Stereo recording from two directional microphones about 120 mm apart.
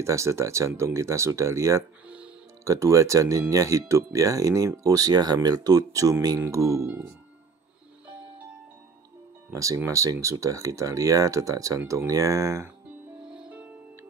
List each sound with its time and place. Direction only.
0.0 s speech: 25° right (ahead or behind)
2.0 s music: 10° right (ahead or behind)
2.6 s speech: 25° right (ahead or behind)
9.5 s speech: 25° right (ahead or behind)
13.2 s music: 5° right (ahead or behind)